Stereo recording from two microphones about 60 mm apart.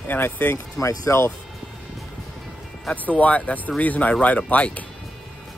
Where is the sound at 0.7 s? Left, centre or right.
Left.